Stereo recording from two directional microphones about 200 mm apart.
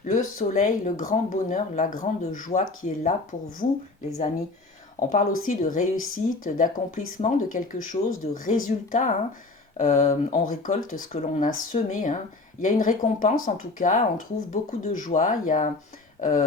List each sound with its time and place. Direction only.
0.0 s speech: 40° left (ahead or behind)
4.9 s a woman's voice: 40° left (ahead or behind)